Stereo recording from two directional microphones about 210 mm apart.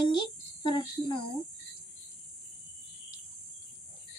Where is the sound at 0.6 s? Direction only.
20° left (ahead or behind).